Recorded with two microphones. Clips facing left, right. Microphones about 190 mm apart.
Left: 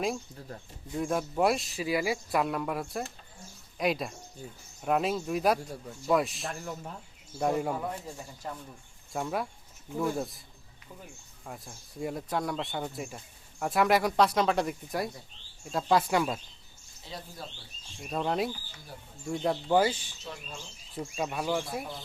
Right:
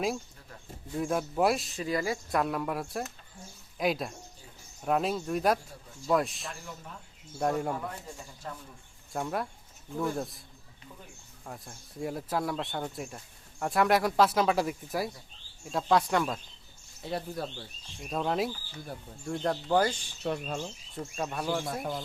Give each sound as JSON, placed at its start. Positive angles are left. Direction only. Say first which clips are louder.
{"t": 0.3, "sound": "speech", "louder": "left 8 dB", "side_deg": 40}
{"t": 0.9, "sound": "speech", "louder": "even", "side_deg": 0}
{"t": 9.1, "sound": "speech", "louder": "even", "side_deg": 0}
{"t": 11.4, "sound": "speech", "louder": "even", "side_deg": 0}
{"t": 17.0, "sound": "speech", "louder": "right 9 dB", "side_deg": -60}
{"t": 18.0, "sound": "speech", "louder": "even", "side_deg": 0}
{"t": 20.2, "sound": "speech", "louder": "right 10 dB", "side_deg": -60}
{"t": 21.0, "sound": "speech", "louder": "left 1 dB", "side_deg": 10}